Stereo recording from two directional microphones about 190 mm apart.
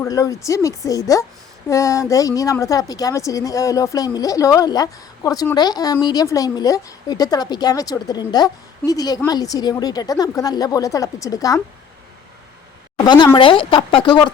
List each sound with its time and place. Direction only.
0.0 s a woman's voice: 15° left (ahead or behind)
13.3 s a woman's voice: 25° left (ahead or behind)